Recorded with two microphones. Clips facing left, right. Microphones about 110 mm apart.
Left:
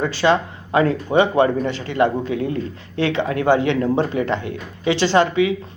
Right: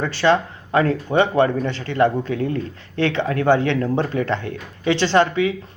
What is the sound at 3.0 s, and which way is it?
Speech, 15° left (ahead or behind).